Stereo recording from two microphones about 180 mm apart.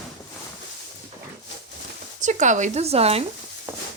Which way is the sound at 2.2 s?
45° right (ahead or behind).